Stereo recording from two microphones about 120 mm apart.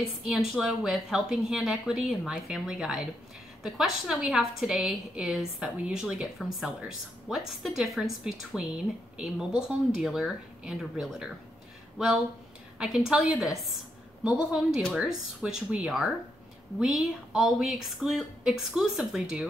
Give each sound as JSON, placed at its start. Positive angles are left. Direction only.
{"t": 0.3, "sound": "a woman's voice", "side_deg": 0}
{"t": 12.7, "sound": "a woman's voice", "side_deg": -5}